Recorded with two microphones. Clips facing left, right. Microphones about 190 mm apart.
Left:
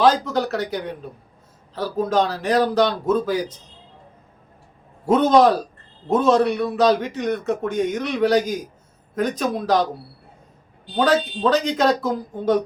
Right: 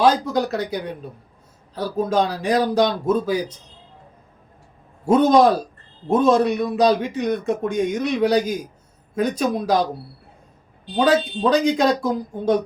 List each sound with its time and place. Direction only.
0.0 s speech: 10° right (ahead or behind)
5.1 s speech: 10° right (ahead or behind)
10.9 s speech: 10° right (ahead or behind)